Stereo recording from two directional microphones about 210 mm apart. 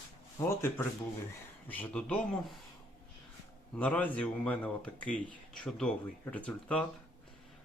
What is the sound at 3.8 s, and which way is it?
Speech, 5° left (ahead or behind).